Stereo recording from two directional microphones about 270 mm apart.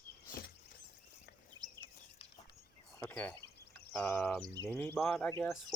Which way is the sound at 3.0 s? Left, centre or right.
Centre.